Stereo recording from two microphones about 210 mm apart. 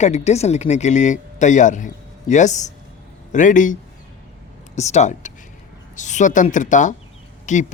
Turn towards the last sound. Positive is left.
turn(degrees=35)  # may be behind; listen again after turning